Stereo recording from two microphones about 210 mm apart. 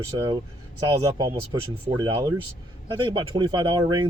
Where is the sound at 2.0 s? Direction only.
20° right (ahead or behind).